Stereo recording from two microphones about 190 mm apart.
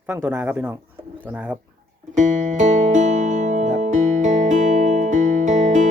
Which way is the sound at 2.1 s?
40° right (ahead or behind).